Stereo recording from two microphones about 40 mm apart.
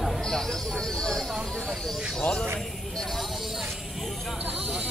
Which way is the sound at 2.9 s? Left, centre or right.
Centre.